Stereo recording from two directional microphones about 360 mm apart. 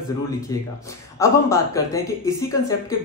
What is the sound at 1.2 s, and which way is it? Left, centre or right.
Speech, centre.